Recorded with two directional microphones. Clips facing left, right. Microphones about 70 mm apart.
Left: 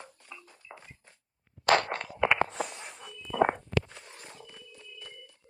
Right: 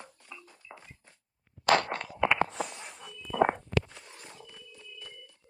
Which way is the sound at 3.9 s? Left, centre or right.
Left.